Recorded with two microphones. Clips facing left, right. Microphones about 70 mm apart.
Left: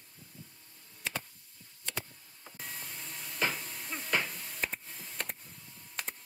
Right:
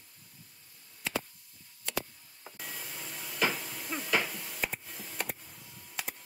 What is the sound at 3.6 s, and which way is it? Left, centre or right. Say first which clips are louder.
Hiss: right 2 dB; right.